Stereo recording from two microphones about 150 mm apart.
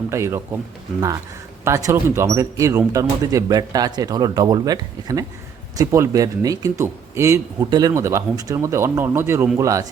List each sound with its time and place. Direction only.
0.1 s speech: 20° right (ahead or behind)
1.6 s speech: 20° right (ahead or behind)